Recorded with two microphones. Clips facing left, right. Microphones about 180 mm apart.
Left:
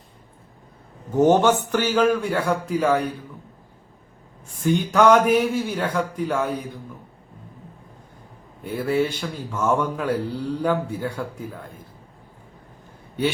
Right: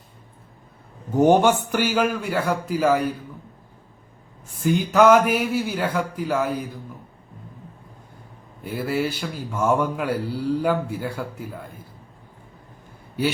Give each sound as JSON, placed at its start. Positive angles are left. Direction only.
{"t": 1.1, "sound": "speech", "side_deg": -10}
{"t": 4.5, "sound": "speech", "side_deg": -10}
{"t": 8.6, "sound": "speech", "side_deg": -5}